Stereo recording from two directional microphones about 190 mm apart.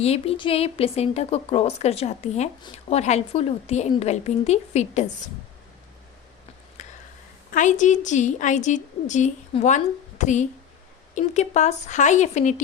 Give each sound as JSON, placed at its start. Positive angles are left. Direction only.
{"t": 0.0, "sound": "a woman's voice", "side_deg": 30}
{"t": 7.5, "sound": "a woman's voice", "side_deg": 40}